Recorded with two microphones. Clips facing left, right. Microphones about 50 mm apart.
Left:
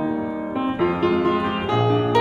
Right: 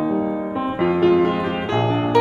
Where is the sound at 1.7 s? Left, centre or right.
Right.